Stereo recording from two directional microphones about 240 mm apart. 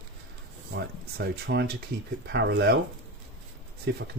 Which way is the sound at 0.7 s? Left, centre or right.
Right.